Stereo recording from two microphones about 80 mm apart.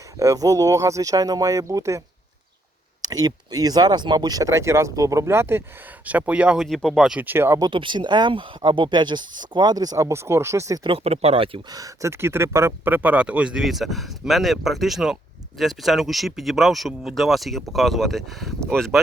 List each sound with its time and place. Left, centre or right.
0.2 s speech: right
3.0 s speech: right
4.5 s speech: right
6.1 s speech: centre
6.6 s speech: centre
7.2 s speech: right
7.7 s speech: right
10.1 s speech: right
12.0 s speech: right; by 18.9 s centre